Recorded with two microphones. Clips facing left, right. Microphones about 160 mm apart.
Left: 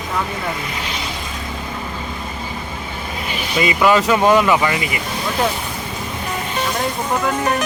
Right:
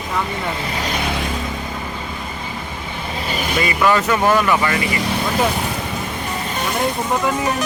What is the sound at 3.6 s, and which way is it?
Speech, 15° left (ahead or behind).